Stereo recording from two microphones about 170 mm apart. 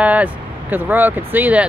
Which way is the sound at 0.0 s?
10° right (ahead or behind).